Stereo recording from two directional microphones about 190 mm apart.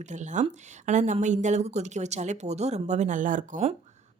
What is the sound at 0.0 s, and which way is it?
Speech, 40° right (ahead or behind).